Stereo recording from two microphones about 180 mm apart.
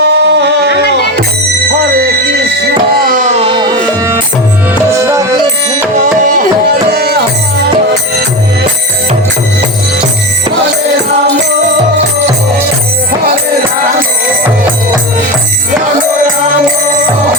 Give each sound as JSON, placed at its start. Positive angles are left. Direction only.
{"t": 0.0, "sound": "a sound", "side_deg": -70}
{"t": 2.2, "sound": "music", "side_deg": -70}
{"t": 4.9, "sound": "music", "side_deg": -15}
{"t": 6.9, "sound": "music", "side_deg": -60}